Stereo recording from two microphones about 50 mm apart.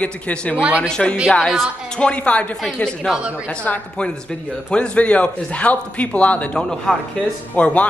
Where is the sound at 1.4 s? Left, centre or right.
Centre.